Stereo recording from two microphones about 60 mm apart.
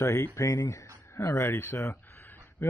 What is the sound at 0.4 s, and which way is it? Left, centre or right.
Speech, left.